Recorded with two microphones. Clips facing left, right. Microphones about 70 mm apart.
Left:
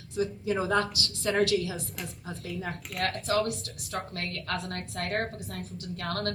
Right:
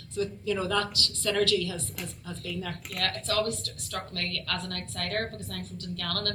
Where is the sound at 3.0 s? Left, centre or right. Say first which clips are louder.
Left 1 dB; left.